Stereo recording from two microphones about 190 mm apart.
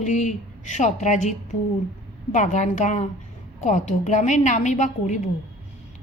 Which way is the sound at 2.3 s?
40° left (ahead or behind).